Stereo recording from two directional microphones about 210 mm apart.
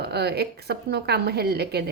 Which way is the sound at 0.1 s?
50° right (ahead or behind).